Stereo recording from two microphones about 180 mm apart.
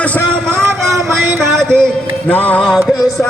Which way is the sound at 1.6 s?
5° left (ahead or behind).